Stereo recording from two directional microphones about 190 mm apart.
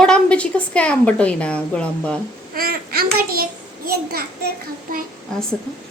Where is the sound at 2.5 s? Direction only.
50° right (ahead or behind).